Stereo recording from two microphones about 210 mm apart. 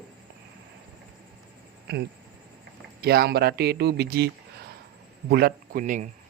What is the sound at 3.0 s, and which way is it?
Speech, 50° right (ahead or behind).